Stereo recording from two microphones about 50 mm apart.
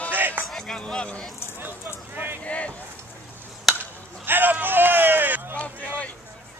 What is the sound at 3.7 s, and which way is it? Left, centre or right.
Chop, centre.